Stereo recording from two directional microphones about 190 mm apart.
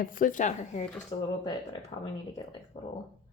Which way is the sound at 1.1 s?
30° left (ahead or behind).